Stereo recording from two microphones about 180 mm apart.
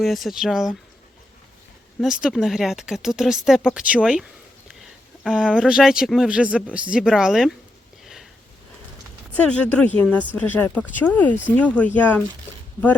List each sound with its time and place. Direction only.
0.0 s speech: centre (ahead or behind)
2.0 s speech: centre (ahead or behind)
4.7 s a sound: 5° right (ahead or behind)
5.5 s speech: 5° right (ahead or behind)
8.0 s sniff: centre (ahead or behind)
9.3 s speech: 10° left (ahead or behind)